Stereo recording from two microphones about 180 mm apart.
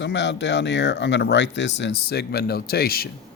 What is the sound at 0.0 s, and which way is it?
Speech, 75° left (ahead or behind).